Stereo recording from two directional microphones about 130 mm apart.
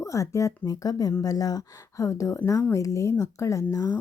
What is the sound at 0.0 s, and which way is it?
Speech, 25° left (ahead or behind).